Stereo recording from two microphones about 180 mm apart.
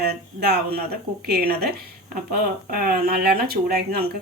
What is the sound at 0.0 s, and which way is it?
Speech, 65° right (ahead or behind).